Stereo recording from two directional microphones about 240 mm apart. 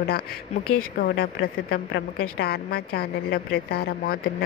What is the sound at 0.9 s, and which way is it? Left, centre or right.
A woman's voice, left.